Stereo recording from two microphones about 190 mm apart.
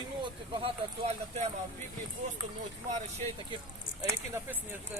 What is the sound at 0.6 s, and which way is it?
Speech, 35° right (ahead or behind).